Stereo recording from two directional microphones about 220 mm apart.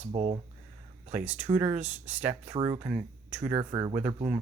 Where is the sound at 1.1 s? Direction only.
5° right (ahead or behind).